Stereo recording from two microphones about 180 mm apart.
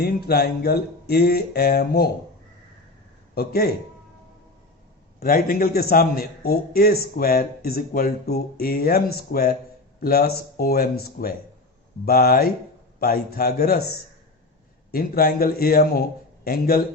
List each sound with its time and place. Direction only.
0.0 s a man's voice: 60° left (ahead or behind)
3.3 s a man's voice: 60° left (ahead or behind)
5.2 s a man's voice: 55° left (ahead or behind)
14.9 s a man's voice: 55° left (ahead or behind)